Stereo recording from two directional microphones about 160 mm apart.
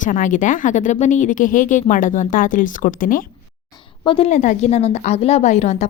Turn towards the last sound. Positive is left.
turn(degrees=45)  # may be behind; listen again after turning